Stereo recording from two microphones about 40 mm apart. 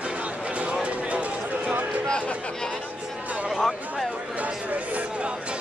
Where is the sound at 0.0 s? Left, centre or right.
Right.